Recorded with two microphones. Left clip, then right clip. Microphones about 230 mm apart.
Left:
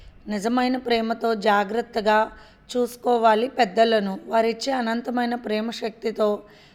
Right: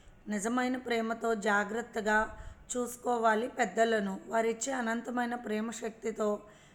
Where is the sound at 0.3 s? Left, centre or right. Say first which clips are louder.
Left 9 dB; left.